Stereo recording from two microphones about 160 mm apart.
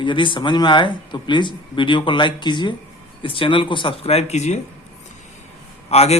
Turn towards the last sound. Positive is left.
turn(degrees=40)  # may be behind; listen again after turning